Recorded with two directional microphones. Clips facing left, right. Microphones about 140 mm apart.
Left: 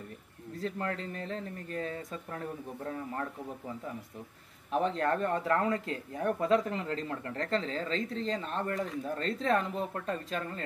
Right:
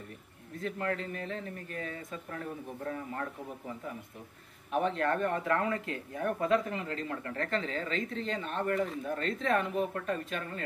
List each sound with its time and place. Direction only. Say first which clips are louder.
0.6 s speech: right 1 dB; 30° left (ahead or behind)
4.7 s speech: even; 30° left (ahead or behind)